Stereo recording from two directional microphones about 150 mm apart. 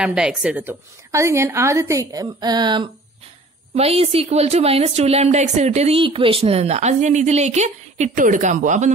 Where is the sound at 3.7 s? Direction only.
40° right (ahead or behind).